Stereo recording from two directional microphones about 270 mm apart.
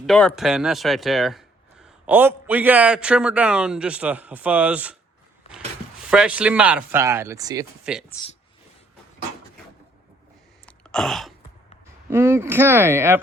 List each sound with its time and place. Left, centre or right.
0.0 s a man's voice: centre
10.7 s a sound: centre
12.1 s speech: centre